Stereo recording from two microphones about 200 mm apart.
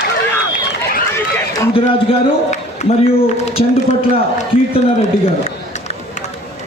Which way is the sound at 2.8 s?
35° left (ahead or behind).